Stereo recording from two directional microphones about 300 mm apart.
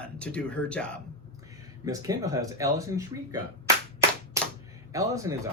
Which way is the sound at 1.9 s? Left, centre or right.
Centre.